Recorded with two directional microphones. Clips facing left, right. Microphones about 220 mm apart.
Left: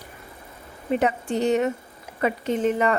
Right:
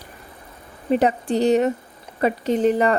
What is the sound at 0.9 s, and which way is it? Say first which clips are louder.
Speech: right 4 dB; 35° right (ahead or behind).